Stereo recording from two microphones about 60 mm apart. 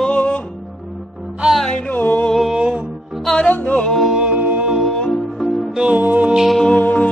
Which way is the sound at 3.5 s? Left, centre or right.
Left.